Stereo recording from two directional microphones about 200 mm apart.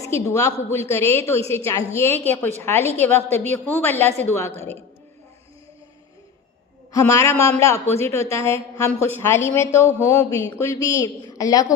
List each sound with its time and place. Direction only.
0.0 s a woman's voice: 15° left (ahead or behind)
6.9 s a woman's voice: 15° left (ahead or behind)